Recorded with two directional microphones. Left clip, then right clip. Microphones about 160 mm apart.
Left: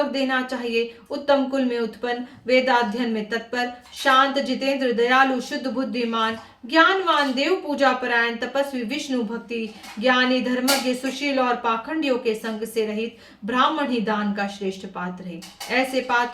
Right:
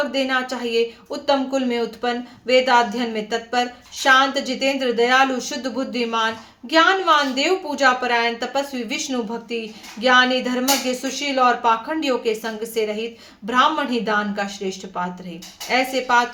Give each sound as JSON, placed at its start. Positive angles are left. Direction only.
{"t": 0.1, "sound": "a woman's voice", "side_deg": -25}